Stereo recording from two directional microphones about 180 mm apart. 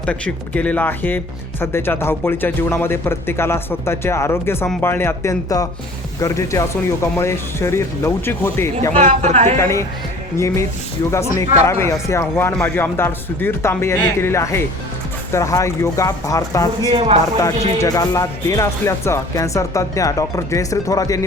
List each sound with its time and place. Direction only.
0.0 s speech: 5° left (ahead or behind)
9.2 s a woman's voice: 40° right (ahead or behind)
9.6 s speech: 15° left (ahead or behind)
16.9 s a woman's voice: 30° right (ahead or behind)
17.7 s speech: 20° left (ahead or behind)